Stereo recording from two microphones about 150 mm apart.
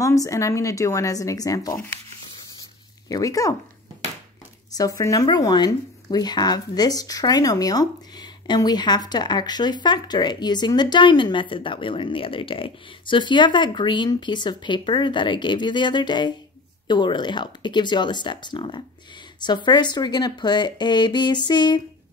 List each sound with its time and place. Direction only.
0.0 s speech: 20° left (ahead or behind)
3.1 s speech: 25° left (ahead or behind)
4.7 s speech: 25° left (ahead or behind)